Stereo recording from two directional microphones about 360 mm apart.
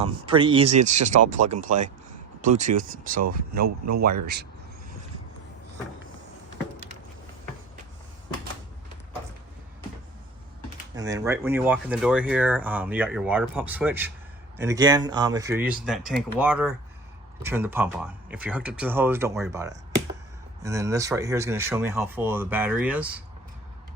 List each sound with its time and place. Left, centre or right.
0.0 s speech: centre
3.2 s speech: right
10.9 s speech: centre